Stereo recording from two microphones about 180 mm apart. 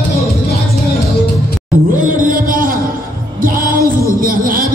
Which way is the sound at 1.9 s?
50° right (ahead or behind).